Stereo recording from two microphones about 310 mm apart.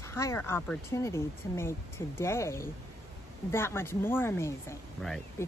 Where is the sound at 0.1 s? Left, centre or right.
Centre.